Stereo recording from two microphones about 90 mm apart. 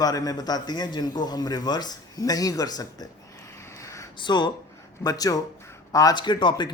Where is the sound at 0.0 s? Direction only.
45° left (ahead or behind).